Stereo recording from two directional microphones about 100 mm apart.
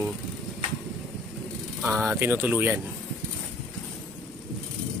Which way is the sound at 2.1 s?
20° right (ahead or behind).